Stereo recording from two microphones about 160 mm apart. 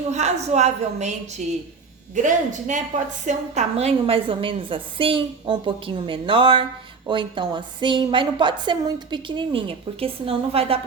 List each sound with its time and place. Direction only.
0.1 s a woman's voice: 45° right (ahead or behind)
2.2 s a woman's voice: 50° right (ahead or behind)